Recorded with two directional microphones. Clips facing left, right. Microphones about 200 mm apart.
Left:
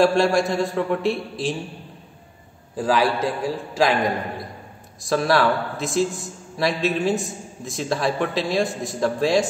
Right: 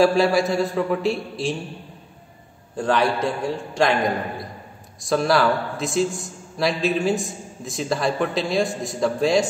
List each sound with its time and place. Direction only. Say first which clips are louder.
0.0 s a man's voice: even; centre (ahead or behind)
2.7 s a man's voice: even; 5° left (ahead or behind)